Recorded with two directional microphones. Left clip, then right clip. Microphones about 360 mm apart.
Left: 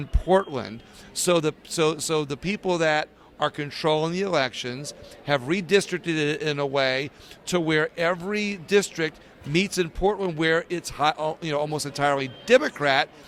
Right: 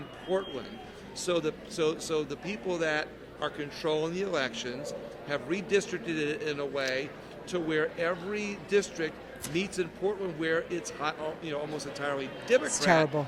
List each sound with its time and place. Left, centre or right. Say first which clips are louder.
0.3 s speech: left 10 dB; left